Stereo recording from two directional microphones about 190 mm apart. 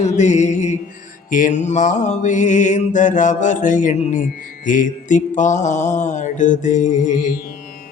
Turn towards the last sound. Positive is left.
turn(degrees=45)  # may be behind; listen again after turning